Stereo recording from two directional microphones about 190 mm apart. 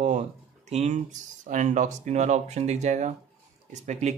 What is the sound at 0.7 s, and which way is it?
Speech, 35° right (ahead or behind).